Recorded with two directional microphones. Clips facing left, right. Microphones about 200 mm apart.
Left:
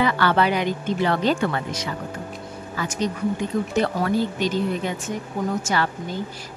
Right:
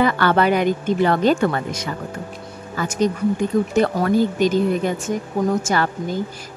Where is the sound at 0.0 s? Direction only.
50° right (ahead or behind).